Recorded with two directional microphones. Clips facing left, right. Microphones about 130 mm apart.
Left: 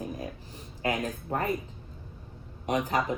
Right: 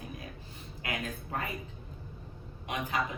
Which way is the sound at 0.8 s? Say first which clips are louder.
Left 7 dB; 40° left (ahead or behind).